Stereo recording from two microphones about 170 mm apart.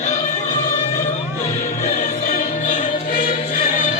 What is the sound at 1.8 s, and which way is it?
Music, 45° left (ahead or behind).